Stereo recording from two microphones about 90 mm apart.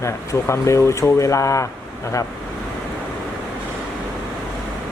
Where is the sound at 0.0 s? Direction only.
30° left (ahead or behind).